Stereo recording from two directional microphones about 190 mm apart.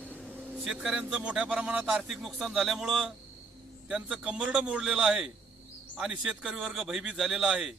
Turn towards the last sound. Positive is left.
turn(degrees=-5)  # may be behind; listen again after turning